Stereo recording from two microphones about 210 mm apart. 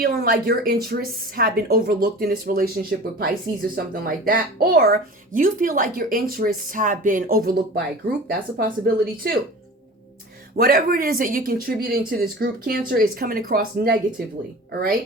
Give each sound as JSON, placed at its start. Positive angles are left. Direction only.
{"t": 0.0, "sound": "speech", "side_deg": -45}
{"t": 3.8, "sound": "speech", "side_deg": -45}
{"t": 10.6, "sound": "speech", "side_deg": -45}